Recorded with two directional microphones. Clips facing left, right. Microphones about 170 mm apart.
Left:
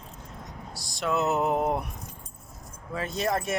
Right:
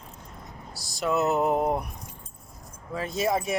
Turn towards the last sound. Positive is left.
turn(degrees=0)  # may be behind; listen again after turning